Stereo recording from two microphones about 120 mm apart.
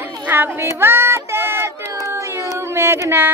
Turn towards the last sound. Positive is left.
turn(degrees=-20)  # may be behind; listen again after turning